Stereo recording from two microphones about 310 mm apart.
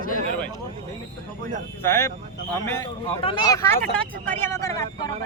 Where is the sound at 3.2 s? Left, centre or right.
Centre.